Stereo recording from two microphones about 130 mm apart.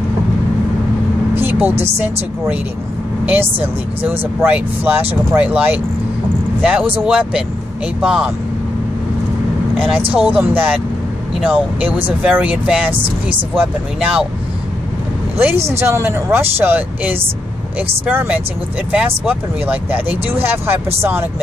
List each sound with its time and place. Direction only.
1.3 s vehicle: 15° right (ahead or behind)
3.6 s speech: 15° right (ahead or behind)
10.1 s speech: 10° right (ahead or behind)
15.3 s speech: 15° right (ahead or behind)